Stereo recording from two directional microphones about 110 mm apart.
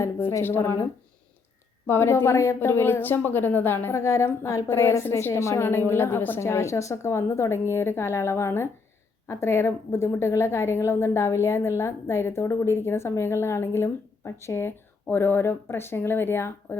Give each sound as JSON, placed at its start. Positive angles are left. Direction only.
{"t": 0.0, "sound": "a woman's voice", "side_deg": 25}
{"t": 1.9, "sound": "a woman's voice", "side_deg": 20}